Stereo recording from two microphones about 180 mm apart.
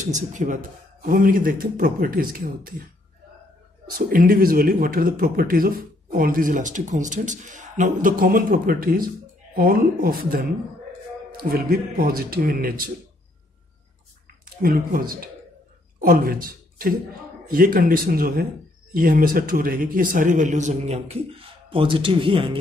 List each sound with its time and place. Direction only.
0.0 s speech: 45° right (ahead or behind)
3.8 s speech: 50° right (ahead or behind)
11.4 s speech: 55° right (ahead or behind)
14.6 s a man's voice: 55° right (ahead or behind); by 22.6 s 30° right (ahead or behind)